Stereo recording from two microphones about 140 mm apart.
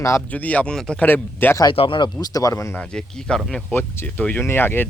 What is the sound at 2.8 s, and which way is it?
Speech, 5° left (ahead or behind).